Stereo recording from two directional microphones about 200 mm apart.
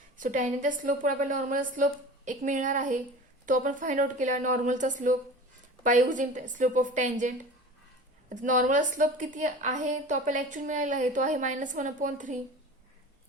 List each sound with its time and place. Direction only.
0.2 s a woman's voice: 40° right (ahead or behind)